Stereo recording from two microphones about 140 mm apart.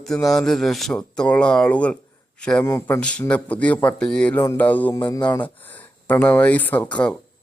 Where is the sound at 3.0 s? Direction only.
10° left (ahead or behind).